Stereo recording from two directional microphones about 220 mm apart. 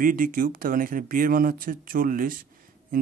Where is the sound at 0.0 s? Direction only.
40° right (ahead or behind).